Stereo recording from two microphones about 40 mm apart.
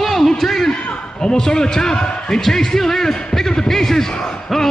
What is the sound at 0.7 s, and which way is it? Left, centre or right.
A man's voice, centre.